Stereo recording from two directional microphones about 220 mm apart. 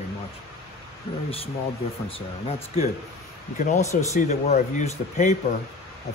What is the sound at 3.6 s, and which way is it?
Speech, 30° left (ahead or behind).